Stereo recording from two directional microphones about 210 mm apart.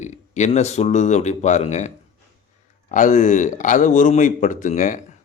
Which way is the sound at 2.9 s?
35° left (ahead or behind).